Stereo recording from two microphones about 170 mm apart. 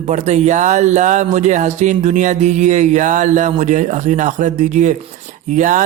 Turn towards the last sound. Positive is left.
turn(degrees=-50)  # may be behind; listen again after turning